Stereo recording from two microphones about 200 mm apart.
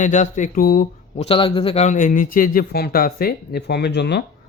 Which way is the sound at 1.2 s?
25° left (ahead or behind).